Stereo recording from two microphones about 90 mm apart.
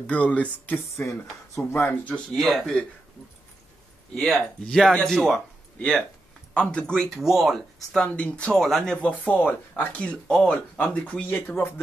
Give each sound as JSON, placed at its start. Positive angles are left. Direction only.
{"t": 0.0, "sound": "speech", "side_deg": 15}
{"t": 1.5, "sound": "speech", "side_deg": 30}
{"t": 2.1, "sound": "speech", "side_deg": 5}
{"t": 4.1, "sound": "speech", "side_deg": 5}
{"t": 7.2, "sound": "speech", "side_deg": -5}
{"t": 7.9, "sound": "speech", "side_deg": 10}